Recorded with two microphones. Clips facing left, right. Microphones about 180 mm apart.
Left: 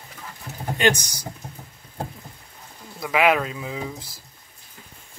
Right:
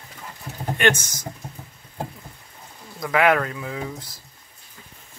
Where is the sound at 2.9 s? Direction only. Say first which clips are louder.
Right 1 dB; 10° left (ahead or behind).